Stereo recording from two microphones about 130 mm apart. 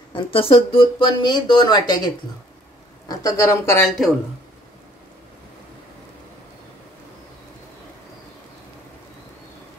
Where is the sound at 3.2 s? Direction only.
25° left (ahead or behind).